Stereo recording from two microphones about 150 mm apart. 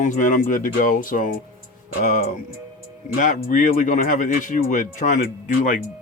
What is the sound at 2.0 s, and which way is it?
Speech, 55° left (ahead or behind).